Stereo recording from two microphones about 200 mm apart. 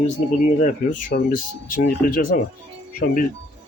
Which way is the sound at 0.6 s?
40° left (ahead or behind).